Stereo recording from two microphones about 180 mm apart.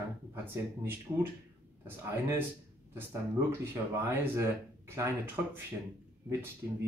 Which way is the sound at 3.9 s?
15° right (ahead or behind).